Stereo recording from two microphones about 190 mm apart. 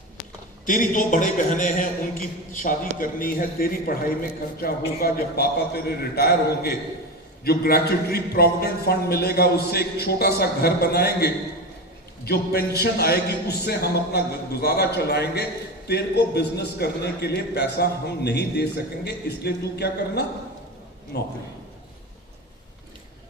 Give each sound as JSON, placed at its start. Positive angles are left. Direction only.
{"t": 0.6, "sound": "a man's voice", "side_deg": 45}